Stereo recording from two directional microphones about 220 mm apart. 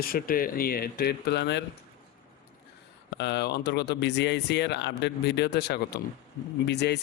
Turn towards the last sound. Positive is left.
turn(degrees=50)  # may be behind; listen again after turning